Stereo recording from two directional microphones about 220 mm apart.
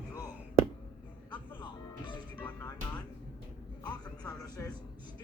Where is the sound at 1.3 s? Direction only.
20° left (ahead or behind).